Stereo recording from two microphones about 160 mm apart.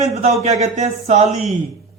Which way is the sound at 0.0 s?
45° right (ahead or behind).